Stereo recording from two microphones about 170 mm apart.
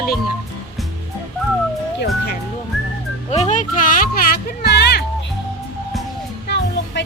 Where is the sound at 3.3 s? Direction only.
45° left (ahead or behind); by 5.0 s 75° left (ahead or behind).